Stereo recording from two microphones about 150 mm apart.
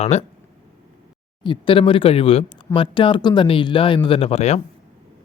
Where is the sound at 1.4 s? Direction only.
35° left (ahead or behind).